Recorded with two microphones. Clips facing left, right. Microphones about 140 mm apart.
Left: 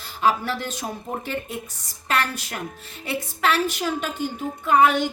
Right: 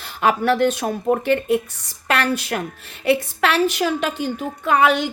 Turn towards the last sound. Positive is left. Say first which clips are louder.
# right 1 dB
turn(degrees=-90)